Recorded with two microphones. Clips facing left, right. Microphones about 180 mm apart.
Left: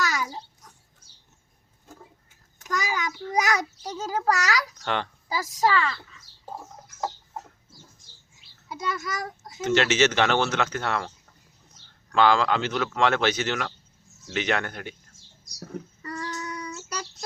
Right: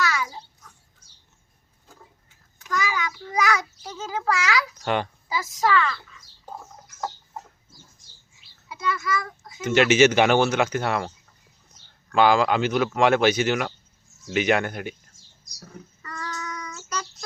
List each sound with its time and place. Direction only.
0.0 s babbling: 40° left (ahead or behind)
2.6 s a sound: 40° left (ahead or behind)
4.8 s a child's voice: 10° right (ahead or behind)
5.3 s speech: 35° left (ahead or behind)
8.7 s a child's voice: 40° left (ahead or behind)
9.6 s speech: 10° right (ahead or behind)
12.1 s speech: 10° right (ahead or behind)
16.0 s child singing: 30° left (ahead or behind)